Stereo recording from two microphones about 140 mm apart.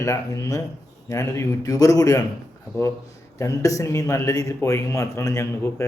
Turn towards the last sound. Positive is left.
turn(degrees=20)  # may be behind; listen again after turning